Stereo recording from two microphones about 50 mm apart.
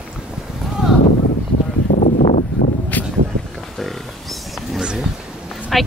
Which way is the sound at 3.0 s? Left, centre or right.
Left.